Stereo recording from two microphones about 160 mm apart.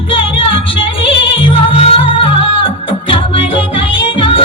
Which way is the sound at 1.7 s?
35° left (ahead or behind).